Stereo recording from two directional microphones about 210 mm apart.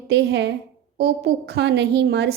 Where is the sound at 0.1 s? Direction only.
50° right (ahead or behind).